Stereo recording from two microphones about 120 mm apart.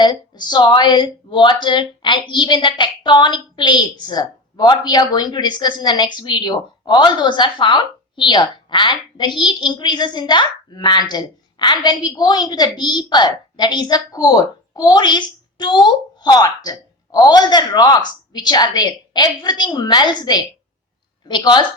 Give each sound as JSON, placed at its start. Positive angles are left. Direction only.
{"t": 0.0, "sound": "speech", "side_deg": 35}